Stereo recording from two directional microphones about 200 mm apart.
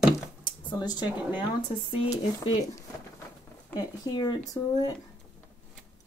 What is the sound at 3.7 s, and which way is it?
Speech, 20° left (ahead or behind).